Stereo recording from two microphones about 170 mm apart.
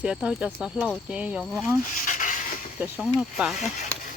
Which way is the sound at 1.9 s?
50° left (ahead or behind).